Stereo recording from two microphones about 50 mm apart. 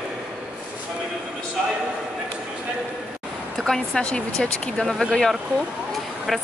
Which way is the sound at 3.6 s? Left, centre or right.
Centre.